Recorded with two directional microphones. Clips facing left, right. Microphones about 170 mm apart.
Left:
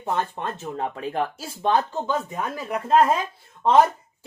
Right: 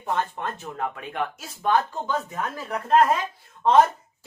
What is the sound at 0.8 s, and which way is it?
Speech, 35° left (ahead or behind).